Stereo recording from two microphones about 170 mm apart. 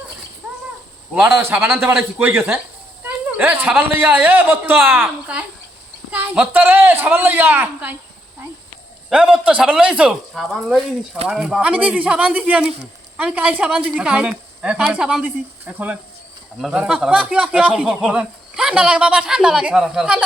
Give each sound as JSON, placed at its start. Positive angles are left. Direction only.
{"t": 1.1, "sound": "a man's voice", "side_deg": -10}
{"t": 9.0, "sound": "a man's voice", "side_deg": -5}